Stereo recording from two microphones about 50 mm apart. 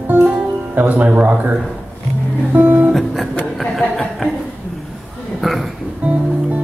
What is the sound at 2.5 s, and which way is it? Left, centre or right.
Speech, right.